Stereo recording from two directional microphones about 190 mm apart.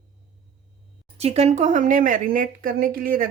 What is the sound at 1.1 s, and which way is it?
Speech, 35° right (ahead or behind).